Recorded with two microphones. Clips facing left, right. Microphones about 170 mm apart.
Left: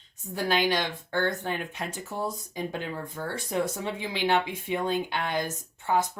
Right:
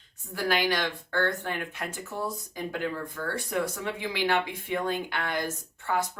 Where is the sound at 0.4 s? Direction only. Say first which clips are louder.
Left 1 dB; 20° left (ahead or behind).